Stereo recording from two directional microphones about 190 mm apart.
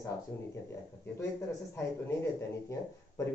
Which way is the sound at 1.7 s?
15° left (ahead or behind).